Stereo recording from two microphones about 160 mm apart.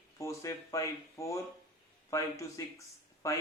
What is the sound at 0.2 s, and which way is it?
Speech, 20° left (ahead or behind).